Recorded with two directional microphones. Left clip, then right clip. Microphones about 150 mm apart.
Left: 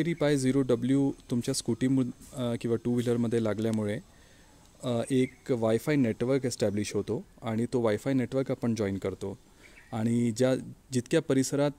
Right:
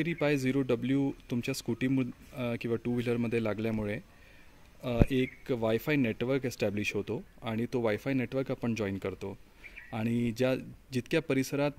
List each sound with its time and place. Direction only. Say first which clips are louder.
0.0 s speech: left 2 dB; 35° left (ahead or behind)